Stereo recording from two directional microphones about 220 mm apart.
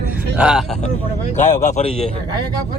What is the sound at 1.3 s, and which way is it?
Speech, 35° left (ahead or behind).